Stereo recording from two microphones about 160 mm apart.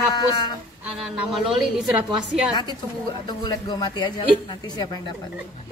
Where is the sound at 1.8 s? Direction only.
Centre (ahead or behind).